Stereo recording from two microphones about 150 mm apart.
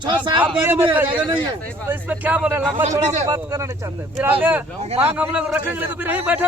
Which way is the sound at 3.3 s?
20° right (ahead or behind).